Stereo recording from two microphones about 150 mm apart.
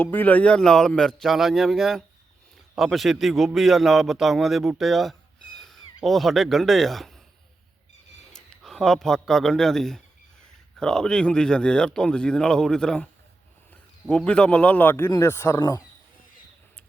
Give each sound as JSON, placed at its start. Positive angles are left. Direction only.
{"t": 0.0, "sound": "a man's voice", "side_deg": 10}
{"t": 8.3, "sound": "a man's voice", "side_deg": 0}
{"t": 14.1, "sound": "a man's voice", "side_deg": 5}